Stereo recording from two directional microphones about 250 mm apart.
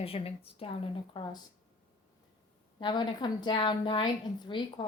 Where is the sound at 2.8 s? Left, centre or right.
Centre.